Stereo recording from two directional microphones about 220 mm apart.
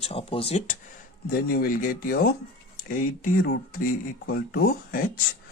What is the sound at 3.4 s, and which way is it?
Speech, 45° left (ahead or behind).